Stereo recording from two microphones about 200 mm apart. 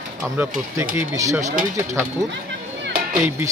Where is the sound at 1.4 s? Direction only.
45° right (ahead or behind).